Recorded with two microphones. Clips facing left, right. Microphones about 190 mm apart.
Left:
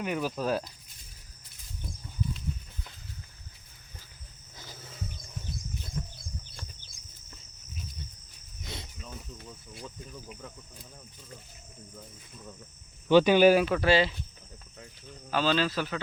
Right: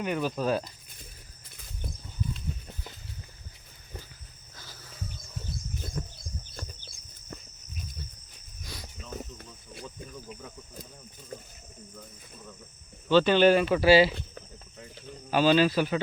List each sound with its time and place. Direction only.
0.0 s speech: 5° left (ahead or behind)
4.5 s wild animals: 20° left (ahead or behind)
6.0 s bird: 45° right (ahead or behind)
8.6 s cricket: 25° left (ahead or behind)
13.1 s speech: 10° left (ahead or behind)
13.7 s speech: 5° right (ahead or behind)
14.1 s speech: 70° right (ahead or behind)
15.3 s speech: 15° right (ahead or behind)